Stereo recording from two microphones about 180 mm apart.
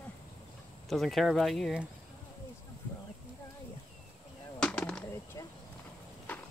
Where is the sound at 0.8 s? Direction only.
Centre (ahead or behind).